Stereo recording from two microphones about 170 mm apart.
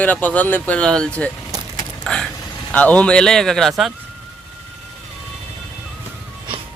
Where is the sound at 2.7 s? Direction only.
10° left (ahead or behind).